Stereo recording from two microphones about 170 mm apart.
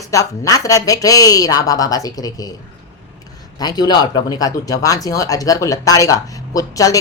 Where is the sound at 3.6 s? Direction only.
25° left (ahead or behind).